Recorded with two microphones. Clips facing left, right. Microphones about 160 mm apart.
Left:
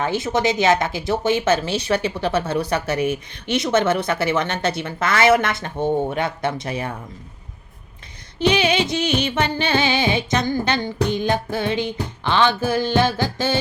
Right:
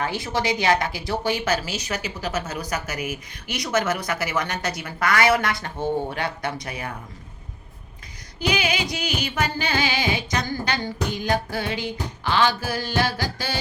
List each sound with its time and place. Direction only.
0.0 s speech: 20° left (ahead or behind)
8.4 s speech: 25° left (ahead or behind)